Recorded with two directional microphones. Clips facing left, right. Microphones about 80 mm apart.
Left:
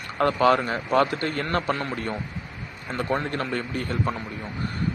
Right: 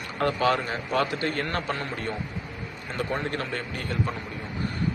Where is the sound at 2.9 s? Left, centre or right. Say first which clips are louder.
Left 3 dB; left.